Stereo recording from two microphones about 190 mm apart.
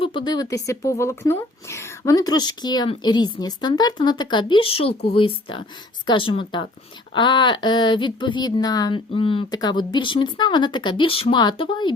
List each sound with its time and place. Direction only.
0.0 s speech: 25° left (ahead or behind)